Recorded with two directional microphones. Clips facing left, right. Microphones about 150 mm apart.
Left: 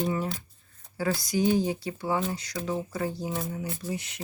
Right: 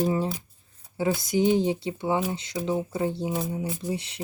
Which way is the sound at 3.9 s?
30° right (ahead or behind).